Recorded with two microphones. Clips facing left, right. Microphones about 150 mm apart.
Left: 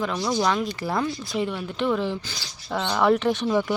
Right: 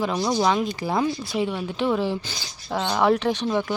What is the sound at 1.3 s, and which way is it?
Speech, 5° right (ahead or behind).